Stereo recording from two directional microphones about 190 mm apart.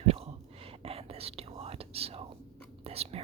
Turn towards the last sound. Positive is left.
turn(degrees=-30)  # may be behind; listen again after turning